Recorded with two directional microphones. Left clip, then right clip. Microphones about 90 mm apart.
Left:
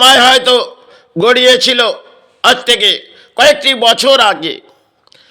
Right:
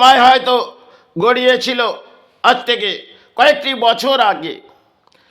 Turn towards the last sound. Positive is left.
turn(degrees=0)  # may be behind; listen again after turning